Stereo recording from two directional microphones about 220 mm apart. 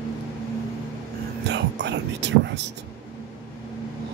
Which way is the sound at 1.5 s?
50° right (ahead or behind).